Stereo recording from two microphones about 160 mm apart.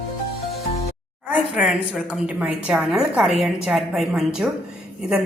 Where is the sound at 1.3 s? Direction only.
10° right (ahead or behind).